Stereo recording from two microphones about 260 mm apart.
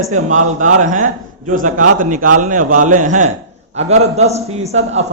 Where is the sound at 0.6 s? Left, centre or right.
Right.